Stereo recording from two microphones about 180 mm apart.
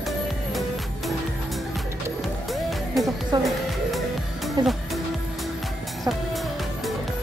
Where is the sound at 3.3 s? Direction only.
25° right (ahead or behind).